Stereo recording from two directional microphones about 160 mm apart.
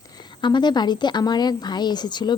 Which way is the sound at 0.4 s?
30° left (ahead or behind).